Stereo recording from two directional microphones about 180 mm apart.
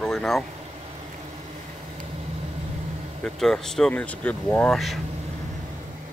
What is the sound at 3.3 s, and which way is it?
Speech, centre (ahead or behind).